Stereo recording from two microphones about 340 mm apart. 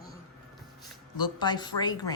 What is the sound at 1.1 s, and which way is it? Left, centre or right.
Speech, centre.